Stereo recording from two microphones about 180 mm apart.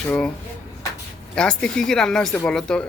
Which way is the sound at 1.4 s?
5° left (ahead or behind).